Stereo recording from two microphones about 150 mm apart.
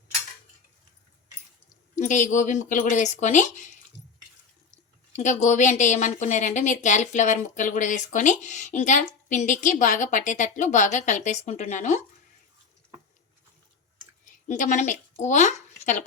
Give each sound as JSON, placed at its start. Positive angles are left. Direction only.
{"t": 2.0, "sound": "a woman's voice", "side_deg": 55}
{"t": 5.1, "sound": "a woman's voice", "side_deg": 55}
{"t": 14.3, "sound": "speech", "side_deg": 55}